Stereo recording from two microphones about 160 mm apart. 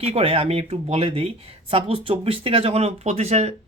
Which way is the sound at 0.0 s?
40° right (ahead or behind).